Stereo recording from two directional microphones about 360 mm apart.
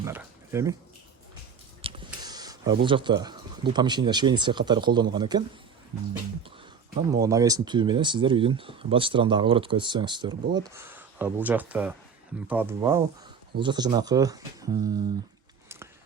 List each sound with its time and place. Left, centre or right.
0.0 s speech: centre
1.8 s a sound: centre
2.0 s speech: centre
6.9 s speech: centre